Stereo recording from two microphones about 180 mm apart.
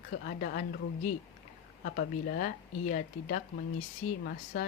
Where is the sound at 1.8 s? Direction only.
55° left (ahead or behind).